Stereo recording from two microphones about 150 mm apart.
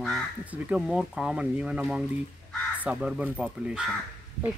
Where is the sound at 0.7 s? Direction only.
5° right (ahead or behind).